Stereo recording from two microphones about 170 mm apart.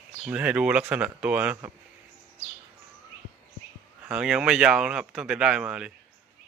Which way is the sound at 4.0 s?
5° right (ahead or behind).